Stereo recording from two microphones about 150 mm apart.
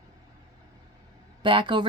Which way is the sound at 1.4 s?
35° right (ahead or behind).